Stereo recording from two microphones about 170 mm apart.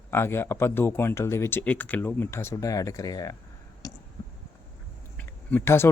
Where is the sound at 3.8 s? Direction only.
20° left (ahead or behind).